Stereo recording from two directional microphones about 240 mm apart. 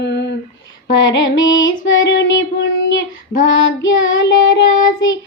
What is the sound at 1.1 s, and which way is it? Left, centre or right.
Female singing, left.